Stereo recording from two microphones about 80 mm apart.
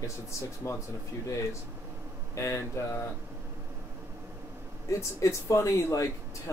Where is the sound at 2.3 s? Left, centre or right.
Left.